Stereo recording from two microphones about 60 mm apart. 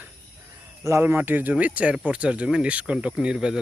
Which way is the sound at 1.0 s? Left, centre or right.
Right.